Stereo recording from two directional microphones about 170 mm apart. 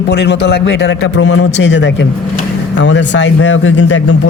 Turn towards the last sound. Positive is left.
turn(degrees=90)